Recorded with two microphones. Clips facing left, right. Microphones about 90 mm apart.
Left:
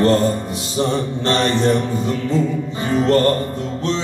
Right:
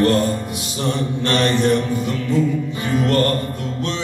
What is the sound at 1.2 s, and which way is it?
Music, 30° left (ahead or behind).